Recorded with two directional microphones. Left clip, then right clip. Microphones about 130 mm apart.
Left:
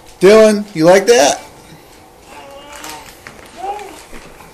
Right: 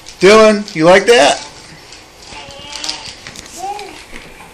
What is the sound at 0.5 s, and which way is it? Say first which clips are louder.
Speech: right 1 dB; 15° left (ahead or behind).